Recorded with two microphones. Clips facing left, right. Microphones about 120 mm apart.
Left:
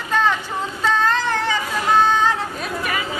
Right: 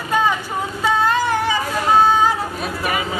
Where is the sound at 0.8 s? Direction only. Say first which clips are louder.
Right 2 dB; 10° right (ahead or behind).